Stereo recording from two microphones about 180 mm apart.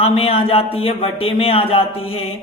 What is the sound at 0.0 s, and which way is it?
Speech, 35° left (ahead or behind).